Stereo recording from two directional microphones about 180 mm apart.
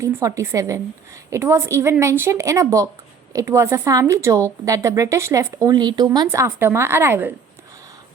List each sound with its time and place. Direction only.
0.0 s a woman's voice: 15° right (ahead or behind)